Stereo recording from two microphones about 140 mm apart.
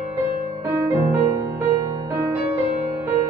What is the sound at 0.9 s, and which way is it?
Music, 20° right (ahead or behind).